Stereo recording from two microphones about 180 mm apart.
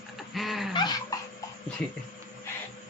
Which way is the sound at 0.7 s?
25° left (ahead or behind).